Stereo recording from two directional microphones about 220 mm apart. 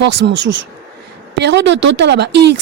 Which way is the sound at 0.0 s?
55° right (ahead or behind).